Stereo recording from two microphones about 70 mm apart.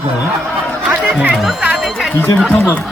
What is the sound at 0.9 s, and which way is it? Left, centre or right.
Music, centre.